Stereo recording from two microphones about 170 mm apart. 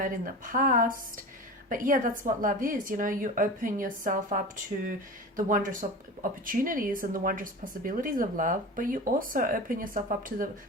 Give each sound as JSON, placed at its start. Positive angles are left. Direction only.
{"t": 0.0, "sound": "speech", "side_deg": -55}
{"t": 5.4, "sound": "speech", "side_deg": -50}